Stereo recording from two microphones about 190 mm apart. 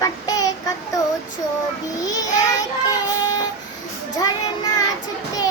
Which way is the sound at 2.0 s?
20° left (ahead or behind).